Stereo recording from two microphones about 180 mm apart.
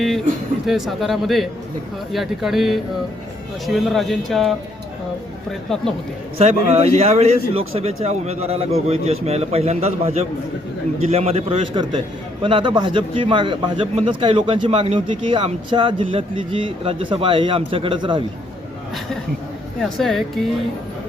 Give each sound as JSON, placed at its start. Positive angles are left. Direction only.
{"t": 0.7, "sound": "speech", "side_deg": 0}
{"t": 6.4, "sound": "a man's voice", "side_deg": -35}
{"t": 19.8, "sound": "speech", "side_deg": 0}